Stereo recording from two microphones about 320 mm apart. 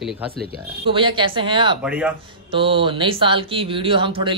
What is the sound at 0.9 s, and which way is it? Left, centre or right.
Speech, centre.